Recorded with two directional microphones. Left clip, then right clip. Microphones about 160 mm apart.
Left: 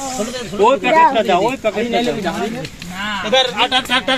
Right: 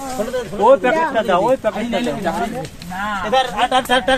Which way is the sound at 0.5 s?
15° right (ahead or behind).